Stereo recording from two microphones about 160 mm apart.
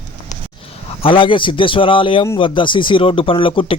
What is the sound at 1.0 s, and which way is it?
Speech, 30° left (ahead or behind).